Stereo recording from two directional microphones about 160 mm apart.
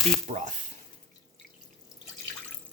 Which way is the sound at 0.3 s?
40° right (ahead or behind).